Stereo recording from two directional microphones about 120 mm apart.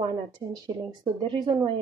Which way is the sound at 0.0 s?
35° right (ahead or behind).